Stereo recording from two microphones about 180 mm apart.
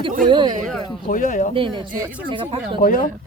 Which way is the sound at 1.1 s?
45° left (ahead or behind).